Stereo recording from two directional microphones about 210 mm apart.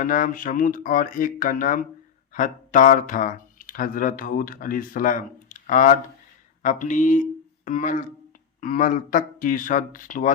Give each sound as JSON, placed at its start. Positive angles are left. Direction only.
{"t": 0.0, "sound": "speech", "side_deg": 40}